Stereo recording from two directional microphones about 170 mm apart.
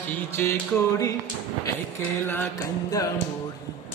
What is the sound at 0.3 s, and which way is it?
Music, 15° left (ahead or behind).